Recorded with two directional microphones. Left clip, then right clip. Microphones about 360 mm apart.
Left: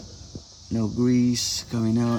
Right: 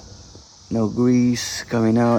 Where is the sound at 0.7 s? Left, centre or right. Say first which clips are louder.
Right 5 dB; centre.